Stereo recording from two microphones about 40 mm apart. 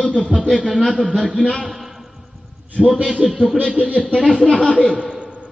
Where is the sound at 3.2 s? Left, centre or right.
Centre.